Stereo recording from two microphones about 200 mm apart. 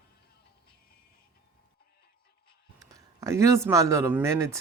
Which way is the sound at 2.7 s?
15° right (ahead or behind).